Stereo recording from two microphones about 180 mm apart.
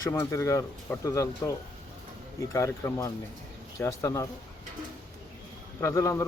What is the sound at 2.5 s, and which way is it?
Speech, 15° left (ahead or behind).